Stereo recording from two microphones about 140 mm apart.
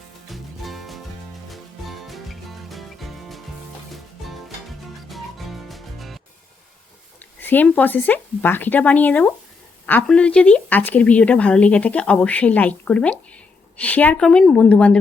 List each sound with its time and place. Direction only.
0.3 s music: centre (ahead or behind)
7.4 s speech: 15° left (ahead or behind)